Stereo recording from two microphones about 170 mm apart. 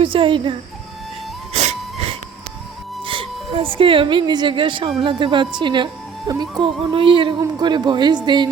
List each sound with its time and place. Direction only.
0.0 s a child's voice: 30° right (ahead or behind)
1.5 s dog: 35° right (ahead or behind)
3.1 s speech: 30° right (ahead or behind)